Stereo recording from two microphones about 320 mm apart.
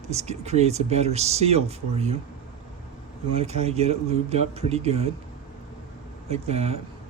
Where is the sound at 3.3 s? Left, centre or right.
Centre.